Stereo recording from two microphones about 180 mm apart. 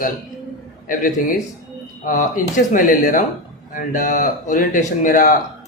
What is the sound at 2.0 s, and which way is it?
A man's voice, 50° left (ahead or behind).